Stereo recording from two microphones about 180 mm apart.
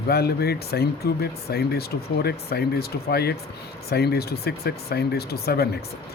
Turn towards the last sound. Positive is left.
turn(degrees=60)  # may be behind; listen again after turning